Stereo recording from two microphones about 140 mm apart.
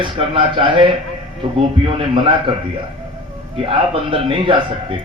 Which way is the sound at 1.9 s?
40° right (ahead or behind).